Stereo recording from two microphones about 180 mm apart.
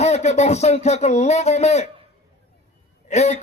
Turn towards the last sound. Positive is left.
turn(degrees=40)  # may be behind; listen again after turning